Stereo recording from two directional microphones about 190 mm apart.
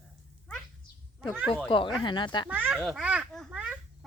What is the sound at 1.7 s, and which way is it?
Speech, 25° left (ahead or behind).